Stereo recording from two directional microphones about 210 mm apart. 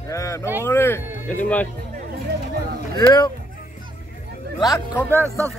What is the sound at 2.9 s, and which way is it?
Speech, 20° left (ahead or behind).